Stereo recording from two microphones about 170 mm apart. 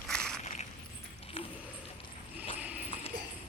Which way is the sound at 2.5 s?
10° right (ahead or behind).